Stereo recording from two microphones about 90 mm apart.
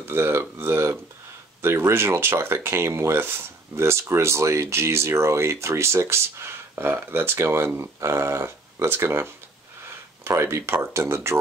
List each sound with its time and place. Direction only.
0.1 s speech: 25° right (ahead or behind)